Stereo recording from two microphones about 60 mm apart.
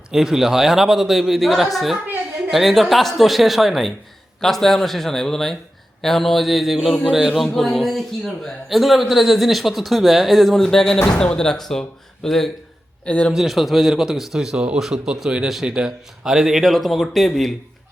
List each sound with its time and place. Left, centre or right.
0.1 s a man's voice: centre
13.1 s speech: left
13.3 s a man's voice: centre